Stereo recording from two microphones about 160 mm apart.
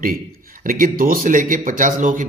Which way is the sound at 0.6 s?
60° right (ahead or behind).